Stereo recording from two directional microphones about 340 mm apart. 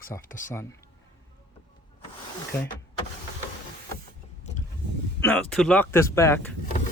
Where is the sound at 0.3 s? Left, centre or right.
Left.